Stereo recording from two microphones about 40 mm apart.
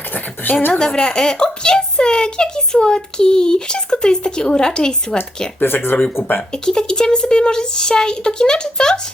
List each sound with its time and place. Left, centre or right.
0.7 s a woman's voice: centre
5.5 s speech: left
6.5 s speech: centre